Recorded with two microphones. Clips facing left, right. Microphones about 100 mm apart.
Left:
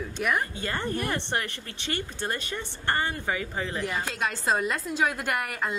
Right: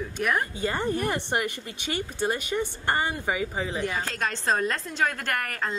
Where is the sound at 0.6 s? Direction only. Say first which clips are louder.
Right 3 dB; 15° right (ahead or behind).